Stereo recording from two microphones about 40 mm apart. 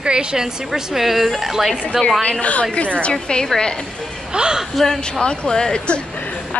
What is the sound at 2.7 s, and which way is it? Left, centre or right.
Speech, left.